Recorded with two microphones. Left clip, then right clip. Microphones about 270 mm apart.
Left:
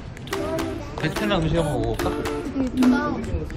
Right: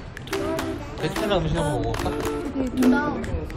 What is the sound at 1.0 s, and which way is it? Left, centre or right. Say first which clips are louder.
Speech: even; centre.